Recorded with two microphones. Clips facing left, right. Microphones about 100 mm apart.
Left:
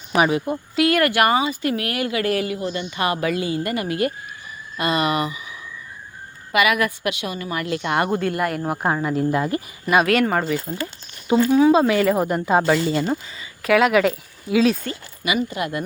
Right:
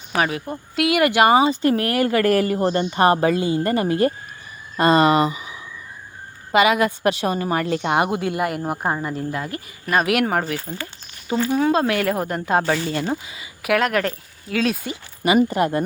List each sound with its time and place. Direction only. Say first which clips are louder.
0.2 s speech: left 4 dB; 25° left (ahead or behind)
0.8 s speech: left 1 dB; 5° right (ahead or behind)
1.0 s speech: right 3 dB; 20° right (ahead or behind)
7.1 s speech: right 6 dB; 35° right (ahead or behind)
7.9 s speech: left 2 dB; 15° right (ahead or behind)
8.6 s speech: left 2 dB; 5° right (ahead or behind)
9.3 s speech: left 6 dB; 20° left (ahead or behind)
9.8 s speech: left 2 dB; 5° left (ahead or behind)
10.1 s speech: left 1 dB; 10° right (ahead or behind)
13.7 s speech: left 4 dB; 5° left (ahead or behind)
15.2 s speech: right 6 dB; 40° right (ahead or behind)